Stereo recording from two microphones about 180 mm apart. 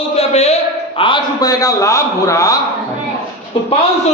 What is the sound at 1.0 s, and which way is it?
A man's voice, 25° left (ahead or behind).